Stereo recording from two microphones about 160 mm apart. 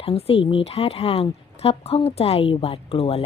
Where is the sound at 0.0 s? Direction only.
35° left (ahead or behind).